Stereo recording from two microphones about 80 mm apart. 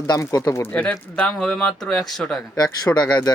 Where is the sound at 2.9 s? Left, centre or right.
Left.